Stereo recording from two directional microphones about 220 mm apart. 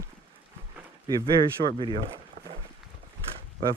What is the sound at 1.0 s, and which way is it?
Speech, 20° right (ahead or behind).